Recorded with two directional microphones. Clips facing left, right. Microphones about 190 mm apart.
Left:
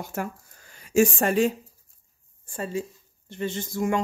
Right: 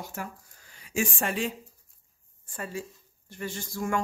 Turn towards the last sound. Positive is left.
turn(degrees=20)  # may be behind; listen again after turning